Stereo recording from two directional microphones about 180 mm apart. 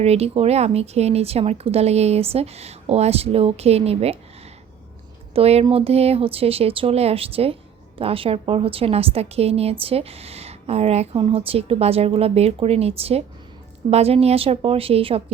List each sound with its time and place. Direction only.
0.0 s a woman's voice: 35° right (ahead or behind)
5.3 s a woman's voice: 35° right (ahead or behind)